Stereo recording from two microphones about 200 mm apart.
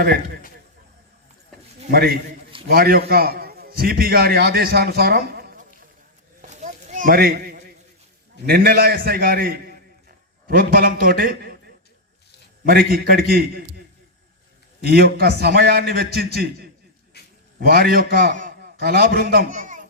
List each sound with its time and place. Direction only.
1.9 s a man's voice: 50° right (ahead or behind)
6.4 s a sound: 40° right (ahead or behind)
8.4 s a man's voice: 50° right (ahead or behind)
14.8 s a man's voice: 50° right (ahead or behind)
17.2 s a sound: 55° left (ahead or behind)
17.7 s a man's voice: 50° right (ahead or behind)